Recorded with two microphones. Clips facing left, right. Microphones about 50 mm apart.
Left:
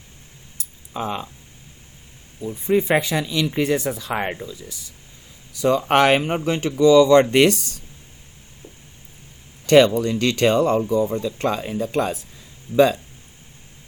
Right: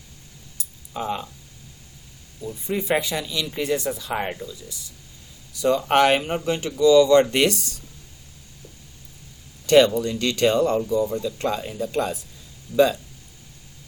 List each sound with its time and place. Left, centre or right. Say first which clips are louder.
0.9 s speech: left 1 dB; left
2.6 s speech: left 5 dB; left
5.6 s speech: left 2 dB; left
9.6 s speech: left 2 dB; left